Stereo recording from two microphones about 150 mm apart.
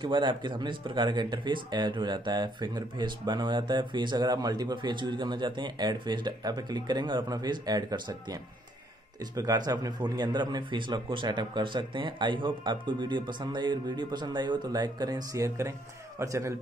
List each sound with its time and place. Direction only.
0.0 s speech: 30° right (ahead or behind)